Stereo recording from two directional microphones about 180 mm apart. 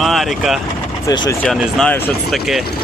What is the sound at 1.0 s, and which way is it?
Speech, 20° left (ahead or behind).